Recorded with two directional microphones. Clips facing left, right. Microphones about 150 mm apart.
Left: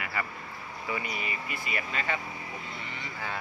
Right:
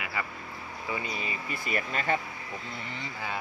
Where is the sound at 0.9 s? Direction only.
25° right (ahead or behind).